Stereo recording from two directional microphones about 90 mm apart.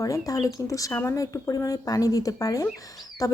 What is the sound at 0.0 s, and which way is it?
A woman's voice, 40° left (ahead or behind).